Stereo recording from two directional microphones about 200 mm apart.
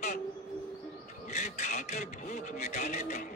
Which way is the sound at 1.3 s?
35° left (ahead or behind).